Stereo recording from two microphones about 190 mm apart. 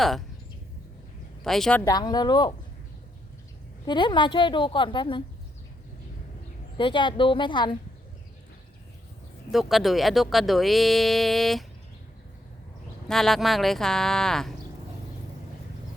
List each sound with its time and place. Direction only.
1.5 s a woman's voice: centre (ahead or behind)
1.8 s a woman's voice: 20° left (ahead or behind)
3.8 s a woman's voice: 25° left (ahead or behind)
6.7 s a woman's voice: 25° left (ahead or behind)
9.5 s a woman's voice: centre (ahead or behind)
13.1 s a woman's voice: centre (ahead or behind)